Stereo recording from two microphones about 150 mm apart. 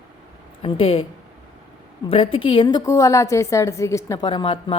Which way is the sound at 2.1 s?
35° left (ahead or behind).